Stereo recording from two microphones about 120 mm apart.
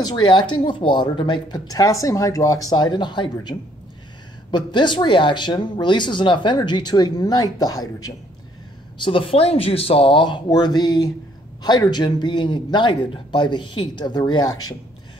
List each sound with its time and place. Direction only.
0.0 s speech: 40° left (ahead or behind)
9.0 s speech: 50° left (ahead or behind)